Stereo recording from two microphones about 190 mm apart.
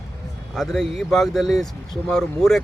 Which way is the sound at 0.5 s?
Centre (ahead or behind).